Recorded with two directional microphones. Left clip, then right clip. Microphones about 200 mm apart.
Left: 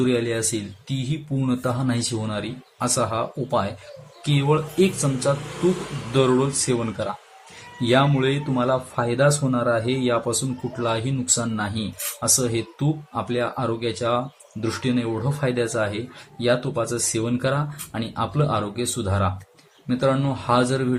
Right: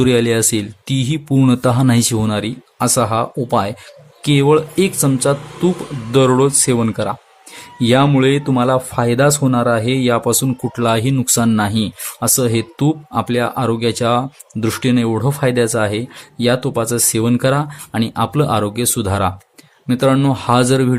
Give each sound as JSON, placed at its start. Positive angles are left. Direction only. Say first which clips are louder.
{"t": 0.0, "sound": "speech", "louder": "right 8 dB", "side_deg": -55}